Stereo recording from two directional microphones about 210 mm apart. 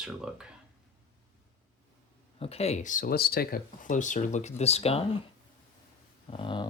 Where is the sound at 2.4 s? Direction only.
30° left (ahead or behind).